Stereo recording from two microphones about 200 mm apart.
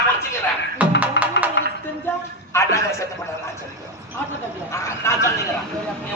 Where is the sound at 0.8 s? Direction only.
5° right (ahead or behind).